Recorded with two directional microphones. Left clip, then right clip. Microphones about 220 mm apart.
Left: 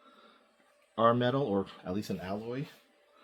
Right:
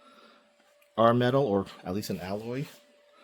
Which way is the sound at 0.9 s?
50° right (ahead or behind).